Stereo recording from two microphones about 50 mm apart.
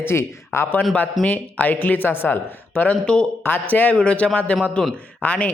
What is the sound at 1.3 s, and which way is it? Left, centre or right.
Speech, left.